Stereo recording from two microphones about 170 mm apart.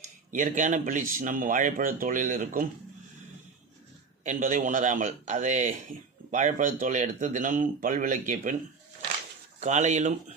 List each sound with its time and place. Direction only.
0.3 s speech: 50° right (ahead or behind)
4.2 s speech: 50° right (ahead or behind)
9.6 s speech: 45° right (ahead or behind)